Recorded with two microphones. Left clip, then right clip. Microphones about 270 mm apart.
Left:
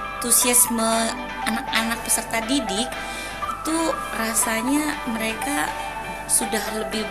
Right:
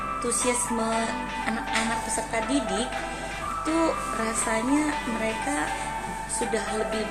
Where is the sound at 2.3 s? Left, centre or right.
Left.